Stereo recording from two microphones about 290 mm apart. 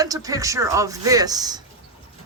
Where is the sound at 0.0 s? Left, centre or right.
Centre.